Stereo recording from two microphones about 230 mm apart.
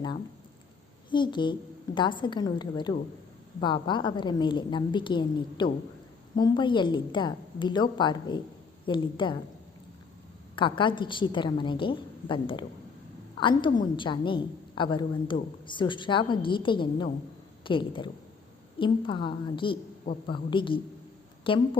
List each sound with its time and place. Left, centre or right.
1.1 s a woman's voice: centre
10.5 s a woman's voice: left